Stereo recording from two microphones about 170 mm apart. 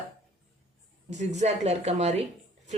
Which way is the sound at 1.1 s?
45° right (ahead or behind).